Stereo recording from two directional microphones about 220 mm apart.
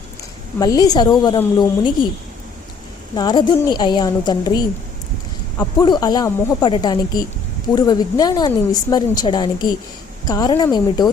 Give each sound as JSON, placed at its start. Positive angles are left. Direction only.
{"t": 0.6, "sound": "a woman's voice", "side_deg": 15}
{"t": 3.2, "sound": "a woman's voice", "side_deg": 20}